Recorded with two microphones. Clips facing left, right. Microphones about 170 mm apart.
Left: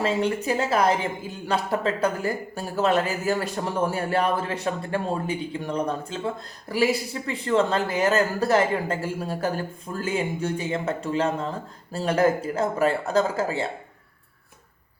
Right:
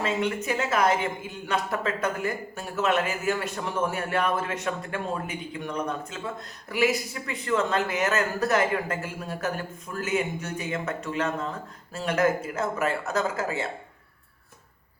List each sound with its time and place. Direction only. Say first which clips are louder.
0.0 s speech: left 3 dB; 35° left (ahead or behind)